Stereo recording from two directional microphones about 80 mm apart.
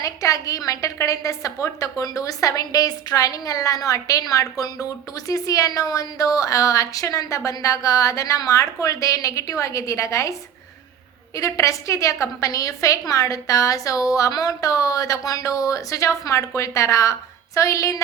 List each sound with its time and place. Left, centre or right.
0.0 s a woman's voice: left
11.3 s a woman's voice: left